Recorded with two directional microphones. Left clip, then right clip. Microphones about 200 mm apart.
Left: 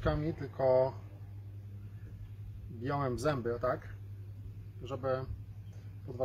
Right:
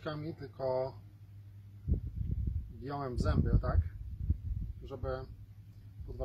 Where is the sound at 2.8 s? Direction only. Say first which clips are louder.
Left 5 dB; 10° left (ahead or behind).